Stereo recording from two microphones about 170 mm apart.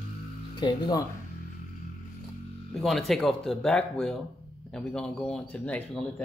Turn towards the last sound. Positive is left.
turn(degrees=5)  # may be behind; listen again after turning